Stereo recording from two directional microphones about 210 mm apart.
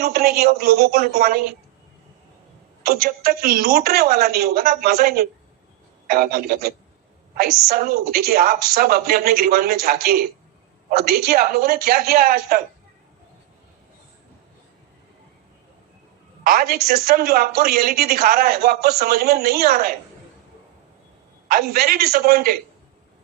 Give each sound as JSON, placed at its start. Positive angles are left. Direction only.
{"t": 0.0, "sound": "a woman's voice", "side_deg": -45}
{"t": 2.8, "sound": "a woman's voice", "side_deg": -45}
{"t": 16.4, "sound": "a woman's voice", "side_deg": -40}
{"t": 21.4, "sound": "a woman's voice", "side_deg": -45}